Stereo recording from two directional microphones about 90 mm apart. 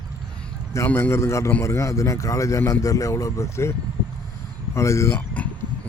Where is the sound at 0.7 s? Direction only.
25° left (ahead or behind).